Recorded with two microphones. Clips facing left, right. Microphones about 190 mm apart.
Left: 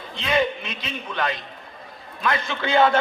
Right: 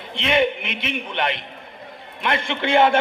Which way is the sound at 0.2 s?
25° right (ahead or behind).